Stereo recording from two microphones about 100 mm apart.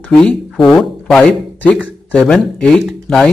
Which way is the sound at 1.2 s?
15° left (ahead or behind).